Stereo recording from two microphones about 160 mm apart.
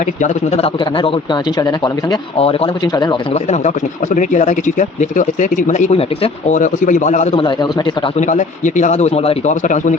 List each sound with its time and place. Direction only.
0.2 s speech: 45° left (ahead or behind)
0.9 s speech: 30° left (ahead or behind)
3.3 s speech: 45° left (ahead or behind)
6.6 s speech: 55° left (ahead or behind)
7.3 s speech: 30° left (ahead or behind)
8.2 s speech: 50° left (ahead or behind)